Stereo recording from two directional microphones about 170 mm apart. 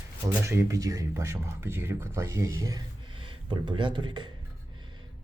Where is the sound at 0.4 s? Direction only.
20° right (ahead or behind).